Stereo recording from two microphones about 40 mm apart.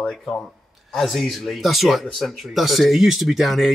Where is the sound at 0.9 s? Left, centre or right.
Centre.